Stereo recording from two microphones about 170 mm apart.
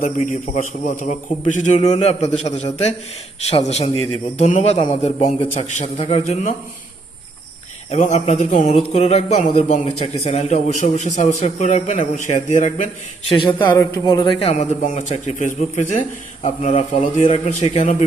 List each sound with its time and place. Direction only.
0.0 s a man's voice: 45° left (ahead or behind)
7.9 s a man's voice: 45° left (ahead or behind)
13.3 s a man's voice: 30° left (ahead or behind)
14.5 s a man's voice: 45° left (ahead or behind)